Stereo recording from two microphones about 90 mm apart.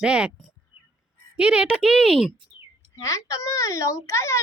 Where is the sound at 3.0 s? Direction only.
35° left (ahead or behind).